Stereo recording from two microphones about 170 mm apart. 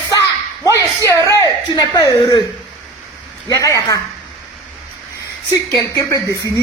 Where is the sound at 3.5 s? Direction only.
20° left (ahead or behind).